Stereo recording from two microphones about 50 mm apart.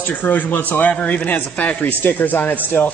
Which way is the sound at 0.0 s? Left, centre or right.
Left.